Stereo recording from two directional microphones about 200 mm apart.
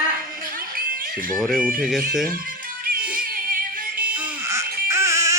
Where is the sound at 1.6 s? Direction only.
45° right (ahead or behind).